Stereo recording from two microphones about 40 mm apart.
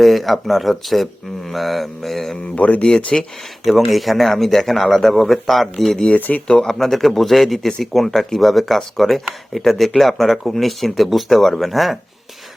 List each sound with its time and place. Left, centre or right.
0.0 s speech: centre
2.6 s speech: left
2.8 s speech: centre
3.6 s speech: centre
6.1 s speech: left
6.5 s a man's voice: centre